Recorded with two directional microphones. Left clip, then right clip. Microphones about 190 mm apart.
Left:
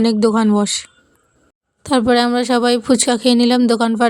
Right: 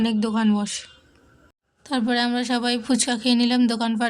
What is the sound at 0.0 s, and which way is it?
A woman's voice, 40° left (ahead or behind).